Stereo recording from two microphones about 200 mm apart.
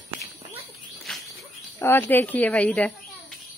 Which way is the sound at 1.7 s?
10° left (ahead or behind).